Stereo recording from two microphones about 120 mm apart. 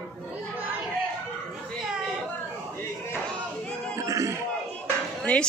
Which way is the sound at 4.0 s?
25° right (ahead or behind).